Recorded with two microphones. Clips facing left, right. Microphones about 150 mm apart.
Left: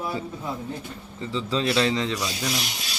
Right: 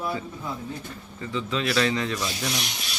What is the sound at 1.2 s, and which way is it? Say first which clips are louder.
Speech: left 2 dB; 30° left (ahead or behind).